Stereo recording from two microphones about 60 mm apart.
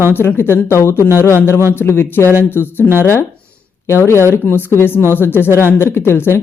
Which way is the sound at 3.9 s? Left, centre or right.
Left.